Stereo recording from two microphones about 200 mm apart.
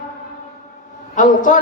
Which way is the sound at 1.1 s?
40° left (ahead or behind).